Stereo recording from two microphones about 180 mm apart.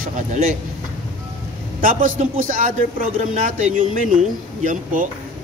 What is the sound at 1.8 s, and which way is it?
Speech, 45° right (ahead or behind).